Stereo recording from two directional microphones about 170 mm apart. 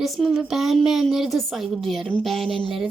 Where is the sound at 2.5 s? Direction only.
30° right (ahead or behind).